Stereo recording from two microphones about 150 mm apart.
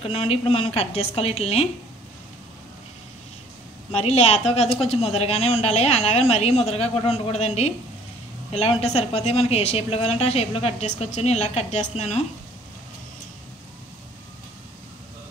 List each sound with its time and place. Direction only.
0.1 s a woman's voice: 40° left (ahead or behind)
3.9 s speech: 45° left (ahead or behind)